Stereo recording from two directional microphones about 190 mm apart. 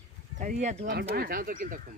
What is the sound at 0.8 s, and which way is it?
Speech, 55° right (ahead or behind).